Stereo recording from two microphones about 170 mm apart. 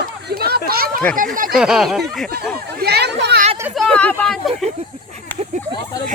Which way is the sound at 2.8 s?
75° right (ahead or behind).